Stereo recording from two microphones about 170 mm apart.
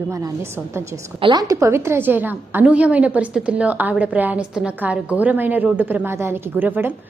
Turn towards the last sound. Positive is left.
turn(degrees=-10)  # may be behind; listen again after turning